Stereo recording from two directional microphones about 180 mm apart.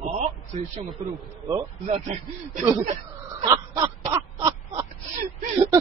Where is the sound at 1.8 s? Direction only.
35° right (ahead or behind).